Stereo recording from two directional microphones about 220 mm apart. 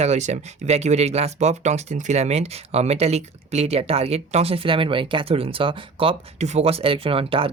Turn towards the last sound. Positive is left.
turn(degrees=-25)  # may be behind; listen again after turning